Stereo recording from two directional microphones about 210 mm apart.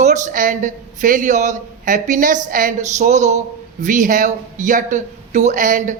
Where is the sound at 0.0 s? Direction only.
35° right (ahead or behind).